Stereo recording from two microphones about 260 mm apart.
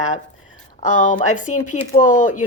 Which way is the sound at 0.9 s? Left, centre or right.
Left.